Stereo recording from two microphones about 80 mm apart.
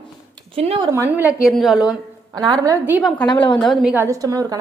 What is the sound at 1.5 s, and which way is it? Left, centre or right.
Speech, centre.